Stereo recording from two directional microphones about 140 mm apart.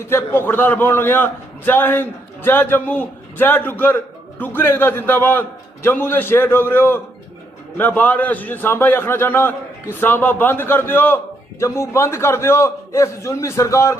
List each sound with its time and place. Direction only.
0.0 s a man's voice: 15° left (ahead or behind)